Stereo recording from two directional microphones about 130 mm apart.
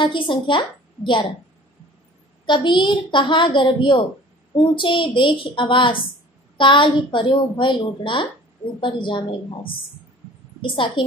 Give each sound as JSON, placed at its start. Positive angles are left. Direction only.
{"t": 0.0, "sound": "a woman's voice", "side_deg": 40}
{"t": 2.4, "sound": "a woman's voice", "side_deg": 35}